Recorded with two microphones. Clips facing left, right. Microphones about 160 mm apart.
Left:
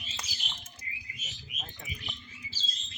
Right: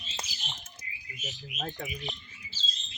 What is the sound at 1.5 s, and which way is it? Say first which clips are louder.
Speech: right 12 dB; 70° right (ahead or behind).